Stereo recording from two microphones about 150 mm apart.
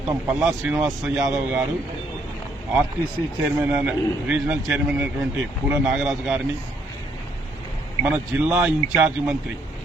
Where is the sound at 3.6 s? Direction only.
10° right (ahead or behind).